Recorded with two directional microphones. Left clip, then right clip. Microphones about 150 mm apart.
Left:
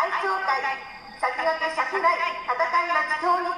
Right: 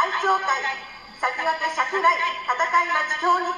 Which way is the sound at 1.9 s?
45° left (ahead or behind).